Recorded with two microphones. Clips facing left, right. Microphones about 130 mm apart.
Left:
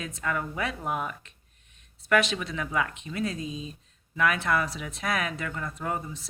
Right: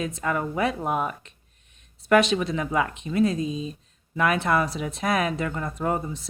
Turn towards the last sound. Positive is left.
turn(degrees=-30)  # may be behind; listen again after turning